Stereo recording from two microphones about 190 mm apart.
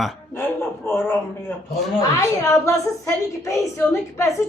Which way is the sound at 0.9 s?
10° left (ahead or behind).